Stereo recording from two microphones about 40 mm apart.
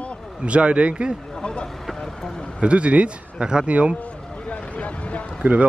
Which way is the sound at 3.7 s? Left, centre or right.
Right.